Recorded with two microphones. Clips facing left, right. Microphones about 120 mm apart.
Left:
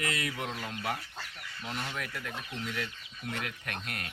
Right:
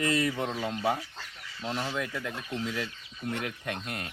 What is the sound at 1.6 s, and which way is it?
Speech, 30° right (ahead or behind).